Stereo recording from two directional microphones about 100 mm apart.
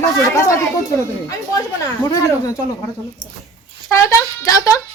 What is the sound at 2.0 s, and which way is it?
Speech, 35° left (ahead or behind).